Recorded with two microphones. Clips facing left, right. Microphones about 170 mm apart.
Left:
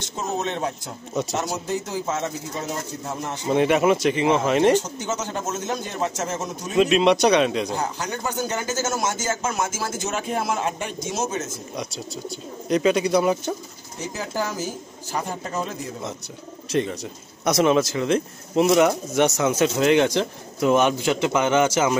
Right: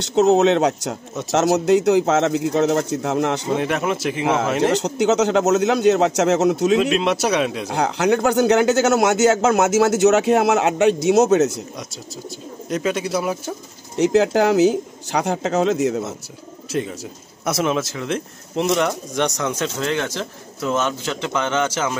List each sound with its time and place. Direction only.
0.0 s a man's voice: 75° right (ahead or behind)
3.5 s speech: centre (ahead or behind)
4.7 s a man's voice: 75° right (ahead or behind)
6.8 s speech: centre (ahead or behind)
7.7 s a man's voice: 80° right
12.6 s speech: centre (ahead or behind)
13.9 s speech: 80° right
16.7 s speech: 5° right (ahead or behind); by 21.9 s 10° left (ahead or behind)